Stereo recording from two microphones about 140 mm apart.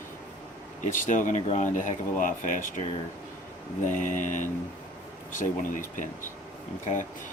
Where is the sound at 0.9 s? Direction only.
65° left (ahead or behind).